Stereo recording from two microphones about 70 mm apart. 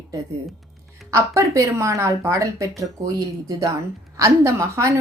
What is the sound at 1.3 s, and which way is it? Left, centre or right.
Speech, right.